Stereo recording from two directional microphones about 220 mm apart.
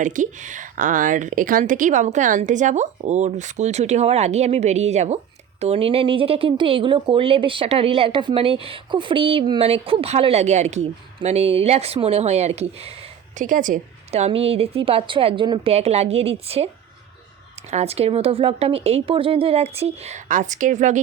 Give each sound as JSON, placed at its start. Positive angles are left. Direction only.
{"t": 0.0, "sound": "a woman's voice", "side_deg": -35}
{"t": 17.7, "sound": "a woman's voice", "side_deg": -30}